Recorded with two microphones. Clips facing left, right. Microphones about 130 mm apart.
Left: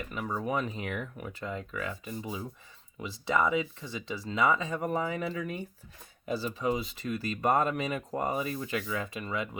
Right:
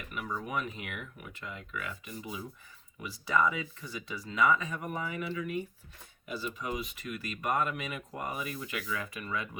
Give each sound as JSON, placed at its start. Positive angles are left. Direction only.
{"t": 0.0, "sound": "speech", "side_deg": 30}
{"t": 3.0, "sound": "speech", "side_deg": 25}